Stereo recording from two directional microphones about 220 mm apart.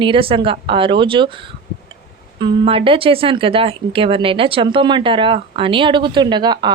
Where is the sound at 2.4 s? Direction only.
25° right (ahead or behind).